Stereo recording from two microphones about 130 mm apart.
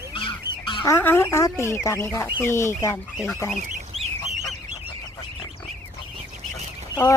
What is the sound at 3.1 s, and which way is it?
Speech, centre (ahead or behind).